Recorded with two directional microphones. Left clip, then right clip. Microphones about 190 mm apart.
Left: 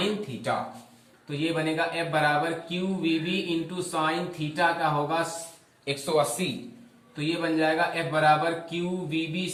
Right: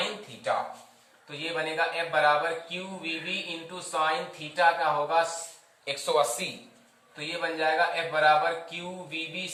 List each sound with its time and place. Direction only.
1.3 s speech: 5° right (ahead or behind)
5.8 s speech: 20° right (ahead or behind)
7.2 s speech: 5° right (ahead or behind)